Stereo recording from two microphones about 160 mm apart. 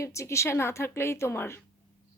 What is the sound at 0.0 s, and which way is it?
Speech, 20° left (ahead or behind).